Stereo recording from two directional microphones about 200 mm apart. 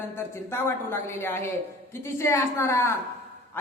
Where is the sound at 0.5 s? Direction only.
10° left (ahead or behind).